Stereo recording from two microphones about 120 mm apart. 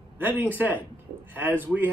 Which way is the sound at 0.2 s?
15° right (ahead or behind).